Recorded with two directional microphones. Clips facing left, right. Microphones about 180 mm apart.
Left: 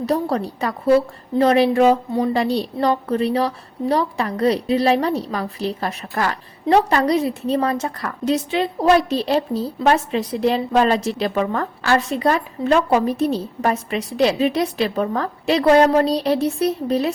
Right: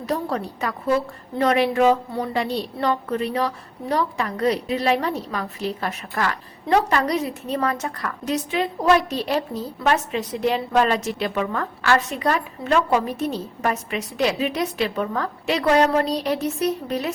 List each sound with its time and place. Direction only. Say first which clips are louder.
0.0 s a woman's voice: left 5 dB; 35° left (ahead or behind)